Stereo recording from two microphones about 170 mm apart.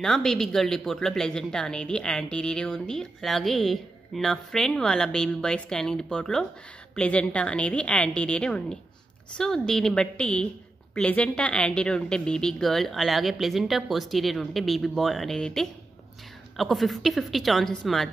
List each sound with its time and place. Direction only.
0.0 s speech: centre (ahead or behind)